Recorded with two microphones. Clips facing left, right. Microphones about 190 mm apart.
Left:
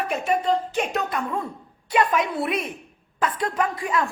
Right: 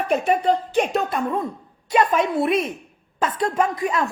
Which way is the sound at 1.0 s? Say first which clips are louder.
Right 4 dB; 25° right (ahead or behind).